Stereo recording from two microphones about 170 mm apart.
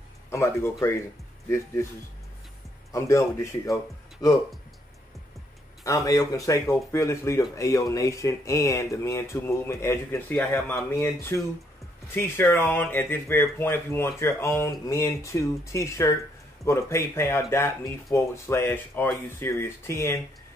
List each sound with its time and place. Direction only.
0.3 s speech: 15° left (ahead or behind)
2.9 s speech: 15° left (ahead or behind)
5.9 s speech: 20° left (ahead or behind)